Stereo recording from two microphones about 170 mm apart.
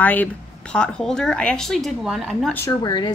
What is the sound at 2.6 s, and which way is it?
Speech, 25° left (ahead or behind).